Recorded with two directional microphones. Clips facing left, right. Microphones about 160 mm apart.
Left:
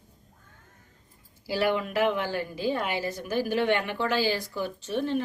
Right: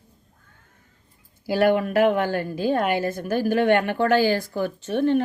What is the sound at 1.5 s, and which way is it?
A woman's voice, 50° right (ahead or behind).